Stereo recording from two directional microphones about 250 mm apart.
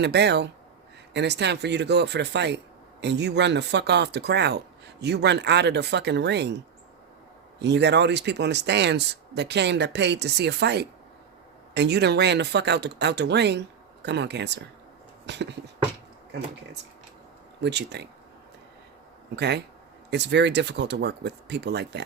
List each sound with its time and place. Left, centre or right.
0.0 s speech: right
7.6 s speech: right
17.6 s speech: right
19.4 s speech: right